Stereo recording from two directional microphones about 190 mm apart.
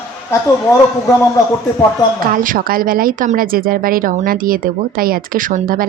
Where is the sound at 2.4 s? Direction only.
45° right (ahead or behind).